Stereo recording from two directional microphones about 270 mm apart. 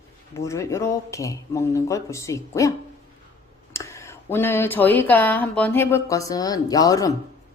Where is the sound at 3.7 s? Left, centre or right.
Centre.